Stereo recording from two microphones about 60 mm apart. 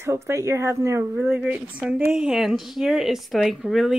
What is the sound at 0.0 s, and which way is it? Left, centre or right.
Speech, right.